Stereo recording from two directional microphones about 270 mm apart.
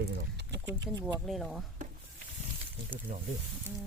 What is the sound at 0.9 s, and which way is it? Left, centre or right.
Speech, centre.